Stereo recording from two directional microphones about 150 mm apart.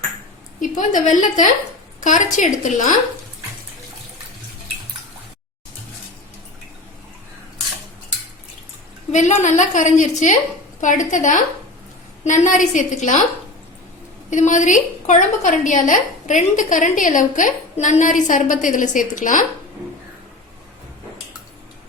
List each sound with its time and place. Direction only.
0.6 s a woman's voice: 60° left (ahead or behind)
9.1 s a woman's voice: 50° left (ahead or behind)
14.3 s a woman's voice: 55° left (ahead or behind)